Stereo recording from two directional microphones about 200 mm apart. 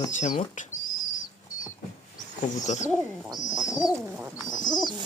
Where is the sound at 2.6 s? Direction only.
35° left (ahead or behind).